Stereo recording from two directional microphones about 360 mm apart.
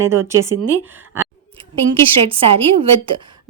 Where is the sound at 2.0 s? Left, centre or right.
Centre.